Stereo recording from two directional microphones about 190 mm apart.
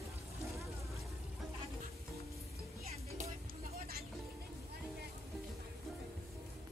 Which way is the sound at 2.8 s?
35° right (ahead or behind).